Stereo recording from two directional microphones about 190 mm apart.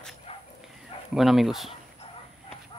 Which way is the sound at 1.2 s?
Centre (ahead or behind).